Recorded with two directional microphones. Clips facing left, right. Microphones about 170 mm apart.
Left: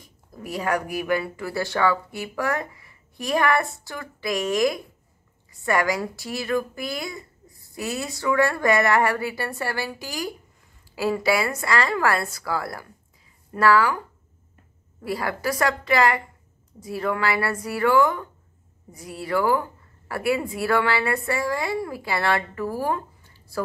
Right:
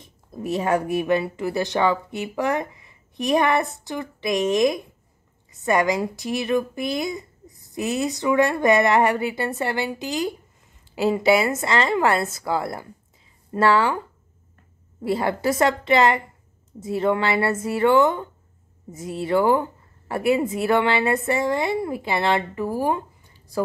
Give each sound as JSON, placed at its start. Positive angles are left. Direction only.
{"t": 0.0, "sound": "a woman's voice", "side_deg": -25}